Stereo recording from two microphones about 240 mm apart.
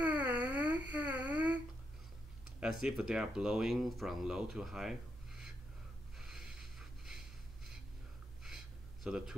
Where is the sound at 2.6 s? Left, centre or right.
Centre.